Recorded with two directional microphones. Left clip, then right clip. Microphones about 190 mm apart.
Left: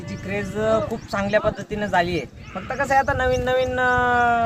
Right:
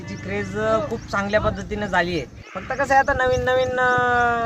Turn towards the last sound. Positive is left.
turn(degrees=-20)  # may be behind; listen again after turning